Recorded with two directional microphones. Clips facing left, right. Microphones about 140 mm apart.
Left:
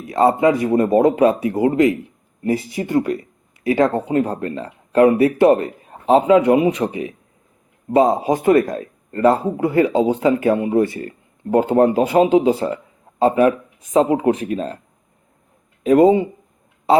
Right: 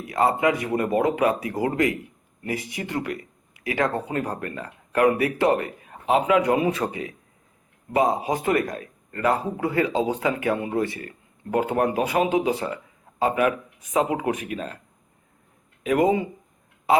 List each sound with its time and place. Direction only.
0.1 s speech: 30° left (ahead or behind)
15.8 s speech: 30° left (ahead or behind)